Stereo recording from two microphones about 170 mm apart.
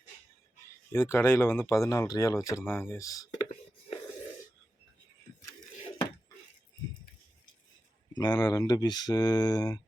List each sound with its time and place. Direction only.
0.9 s speech: 15° left (ahead or behind)
8.1 s speech: 25° left (ahead or behind)